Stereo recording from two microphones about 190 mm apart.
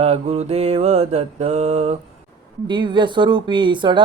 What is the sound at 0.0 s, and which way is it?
Mantra, 35° right (ahead or behind).